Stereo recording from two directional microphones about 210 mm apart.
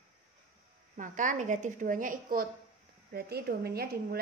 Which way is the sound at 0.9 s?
35° right (ahead or behind).